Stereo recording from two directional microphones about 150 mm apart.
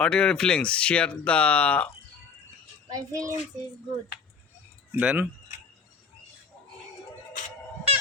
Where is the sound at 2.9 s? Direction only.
25° right (ahead or behind).